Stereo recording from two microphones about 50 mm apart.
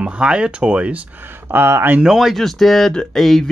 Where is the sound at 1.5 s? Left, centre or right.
Right.